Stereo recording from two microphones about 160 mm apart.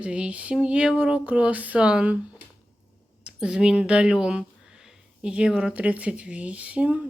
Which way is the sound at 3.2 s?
5° right (ahead or behind).